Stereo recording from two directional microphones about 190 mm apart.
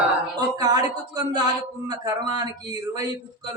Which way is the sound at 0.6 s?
20° right (ahead or behind).